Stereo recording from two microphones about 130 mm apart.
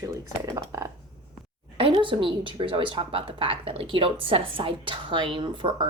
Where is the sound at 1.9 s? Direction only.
40° right (ahead or behind).